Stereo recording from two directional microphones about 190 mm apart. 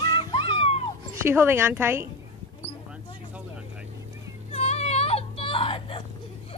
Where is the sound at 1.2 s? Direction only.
15° right (ahead or behind).